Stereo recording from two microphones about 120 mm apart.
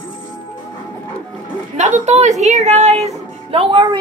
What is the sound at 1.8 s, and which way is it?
A woman's voice, 75° right (ahead or behind).